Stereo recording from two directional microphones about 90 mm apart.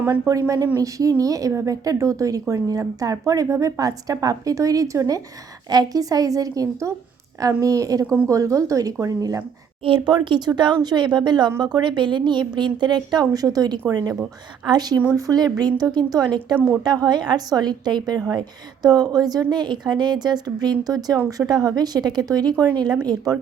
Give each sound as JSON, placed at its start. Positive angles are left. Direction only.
{"t": 0.3, "sound": "a woman's voice", "side_deg": -40}
{"t": 9.8, "sound": "speech", "side_deg": -70}
{"t": 10.2, "sound": "a woman's voice", "side_deg": -55}
{"t": 16.6, "sound": "speech", "side_deg": -10}
{"t": 16.8, "sound": "a woman's voice", "side_deg": -50}